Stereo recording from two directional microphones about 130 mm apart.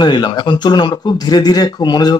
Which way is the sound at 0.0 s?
35° left (ahead or behind).